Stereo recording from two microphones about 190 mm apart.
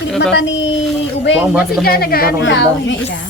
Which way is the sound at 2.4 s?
75° left (ahead or behind).